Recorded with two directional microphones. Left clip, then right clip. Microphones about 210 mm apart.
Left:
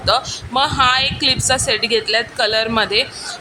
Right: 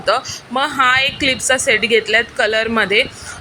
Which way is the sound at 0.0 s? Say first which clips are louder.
Even; 5° right (ahead or behind).